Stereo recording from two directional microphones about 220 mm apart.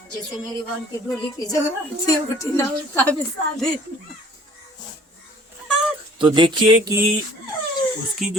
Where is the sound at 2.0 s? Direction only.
15° left (ahead or behind).